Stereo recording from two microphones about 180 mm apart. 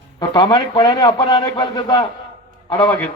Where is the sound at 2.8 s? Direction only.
10° left (ahead or behind).